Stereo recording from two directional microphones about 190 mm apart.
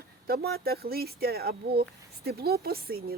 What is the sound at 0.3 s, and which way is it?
Speech, 55° right (ahead or behind).